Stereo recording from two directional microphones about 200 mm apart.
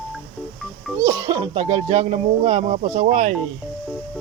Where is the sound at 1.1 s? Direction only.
20° right (ahead or behind); by 3.3 s 35° right (ahead or behind).